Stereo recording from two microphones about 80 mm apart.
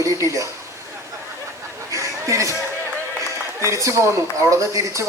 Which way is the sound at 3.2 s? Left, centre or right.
Right.